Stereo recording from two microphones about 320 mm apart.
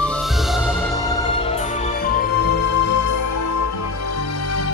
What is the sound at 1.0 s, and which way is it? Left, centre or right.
Music, centre.